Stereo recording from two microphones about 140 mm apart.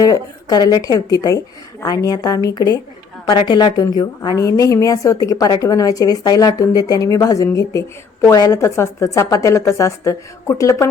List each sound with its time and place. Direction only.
0.0 s a woman's voice: 25° left (ahead or behind)